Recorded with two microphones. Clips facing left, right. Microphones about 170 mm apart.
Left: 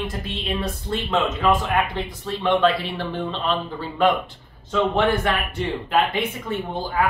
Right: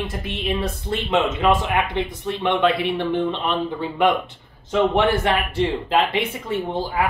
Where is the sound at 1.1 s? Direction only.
20° right (ahead or behind).